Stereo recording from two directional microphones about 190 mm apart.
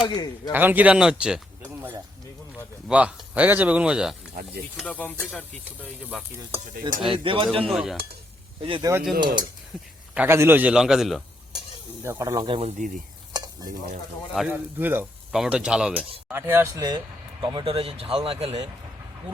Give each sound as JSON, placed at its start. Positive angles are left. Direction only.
{"t": 0.0, "sound": "a man's voice", "side_deg": 20}
{"t": 0.5, "sound": "speech", "side_deg": -10}
{"t": 4.4, "sound": "speech", "side_deg": -50}
{"t": 4.8, "sound": "speech", "side_deg": 5}
{"t": 7.3, "sound": "speech", "side_deg": -30}
{"t": 7.6, "sound": "speech", "side_deg": 0}
{"t": 8.6, "sound": "speech", "side_deg": -25}
{"t": 8.9, "sound": "speech", "side_deg": -5}
{"t": 10.2, "sound": "speech", "side_deg": -15}
{"t": 12.0, "sound": "speech", "side_deg": -15}
{"t": 14.3, "sound": "speech", "side_deg": -10}